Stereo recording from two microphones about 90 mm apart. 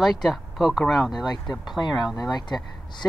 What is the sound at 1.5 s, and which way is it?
Speech, 50° left (ahead or behind).